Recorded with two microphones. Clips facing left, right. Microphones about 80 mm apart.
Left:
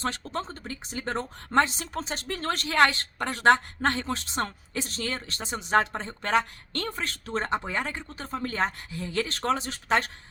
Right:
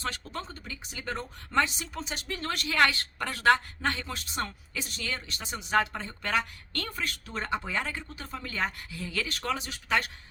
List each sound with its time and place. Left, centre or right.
0.3 s a woman's voice: left
3.8 s a woman's voice: left